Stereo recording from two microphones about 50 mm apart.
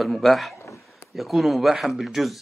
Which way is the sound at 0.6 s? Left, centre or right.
Left.